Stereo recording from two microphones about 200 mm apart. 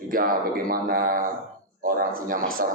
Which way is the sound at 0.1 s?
45° right (ahead or behind).